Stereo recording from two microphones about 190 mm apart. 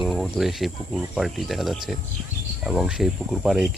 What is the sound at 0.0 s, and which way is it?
Speech, centre (ahead or behind).